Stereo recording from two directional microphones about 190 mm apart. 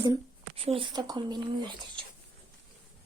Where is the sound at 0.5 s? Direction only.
30° right (ahead or behind).